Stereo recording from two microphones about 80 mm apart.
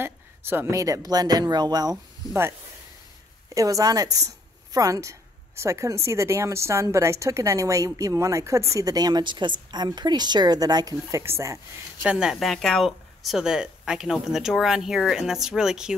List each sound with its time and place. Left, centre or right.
0.0 s a sound: right
0.7 s speech: right
3.5 s a woman's voice: right
9.2 s a woman's voice: right
12.0 s speech: centre